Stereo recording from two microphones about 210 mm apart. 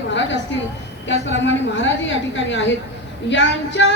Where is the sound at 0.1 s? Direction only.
60° left (ahead or behind).